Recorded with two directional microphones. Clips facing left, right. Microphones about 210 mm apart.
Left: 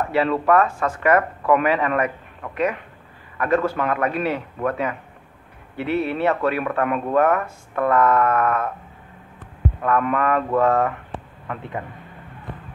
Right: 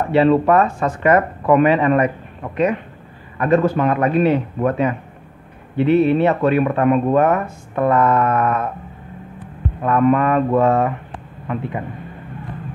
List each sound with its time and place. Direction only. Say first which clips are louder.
0.1 s speech: right 6 dB; 25° right (ahead or behind)
9.8 s speech: right 6 dB; 25° right (ahead or behind)